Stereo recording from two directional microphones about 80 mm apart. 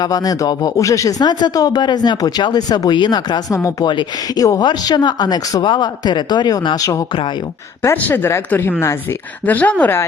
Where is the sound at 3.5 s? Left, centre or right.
Left.